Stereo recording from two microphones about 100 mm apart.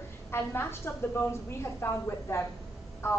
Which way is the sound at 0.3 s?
25° left (ahead or behind).